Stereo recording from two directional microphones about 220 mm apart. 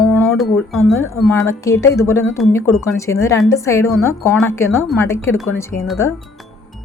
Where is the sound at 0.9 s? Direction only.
10° left (ahead or behind).